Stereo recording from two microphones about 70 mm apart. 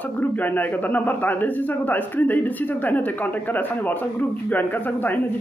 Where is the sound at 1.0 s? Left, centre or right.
Left.